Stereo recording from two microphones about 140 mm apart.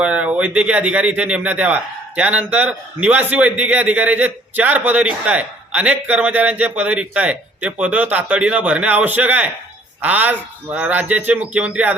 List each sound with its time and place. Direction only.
0.0 s speech: 10° right (ahead or behind)